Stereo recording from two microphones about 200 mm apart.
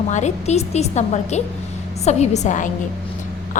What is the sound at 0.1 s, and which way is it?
A woman's voice, 35° left (ahead or behind).